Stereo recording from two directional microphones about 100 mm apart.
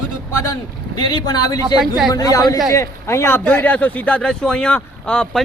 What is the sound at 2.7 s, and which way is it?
Speech, 25° left (ahead or behind).